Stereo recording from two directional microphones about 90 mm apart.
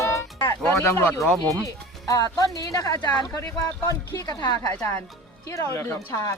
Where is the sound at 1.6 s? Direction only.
40° left (ahead or behind).